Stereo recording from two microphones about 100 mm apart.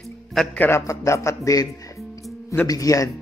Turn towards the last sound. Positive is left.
turn(degrees=35)  # may be behind; listen again after turning